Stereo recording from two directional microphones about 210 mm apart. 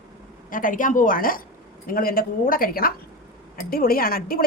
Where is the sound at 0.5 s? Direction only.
40° left (ahead or behind).